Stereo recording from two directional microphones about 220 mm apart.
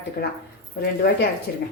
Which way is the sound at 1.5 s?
45° left (ahead or behind).